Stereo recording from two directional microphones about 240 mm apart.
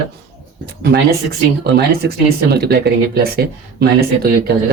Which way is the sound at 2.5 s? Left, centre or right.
Right.